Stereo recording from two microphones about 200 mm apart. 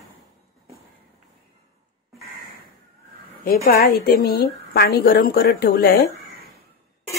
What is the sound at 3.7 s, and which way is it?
A woman's voice, 50° left (ahead or behind).